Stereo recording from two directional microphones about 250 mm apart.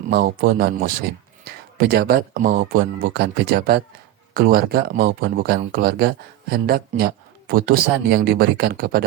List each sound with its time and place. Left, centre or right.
0.1 s speech: right